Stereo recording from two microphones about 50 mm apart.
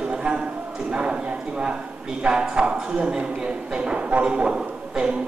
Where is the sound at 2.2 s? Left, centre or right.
Centre.